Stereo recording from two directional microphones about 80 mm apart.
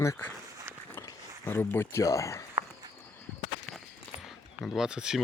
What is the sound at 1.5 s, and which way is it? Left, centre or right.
Speech, left.